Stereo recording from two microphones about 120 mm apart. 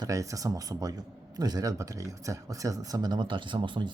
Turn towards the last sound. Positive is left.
turn(degrees=-45)  # may be behind; listen again after turning